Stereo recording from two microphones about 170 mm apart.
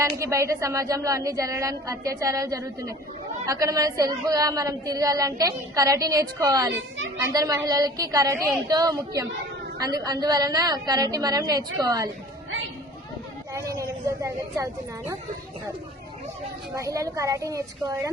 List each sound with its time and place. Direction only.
0.0 s a woman's voice: 15° right (ahead or behind)
13.5 s speech: 20° right (ahead or behind)
16.7 s a woman's voice: 20° right (ahead or behind)